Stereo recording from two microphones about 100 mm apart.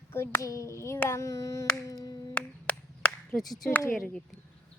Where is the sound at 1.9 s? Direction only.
40° left (ahead or behind).